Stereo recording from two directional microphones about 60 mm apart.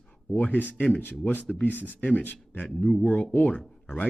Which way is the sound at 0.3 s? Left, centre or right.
Left.